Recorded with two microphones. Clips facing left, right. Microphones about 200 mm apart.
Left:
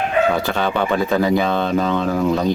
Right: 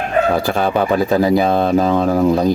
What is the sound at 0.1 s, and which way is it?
Speech, 45° right (ahead or behind).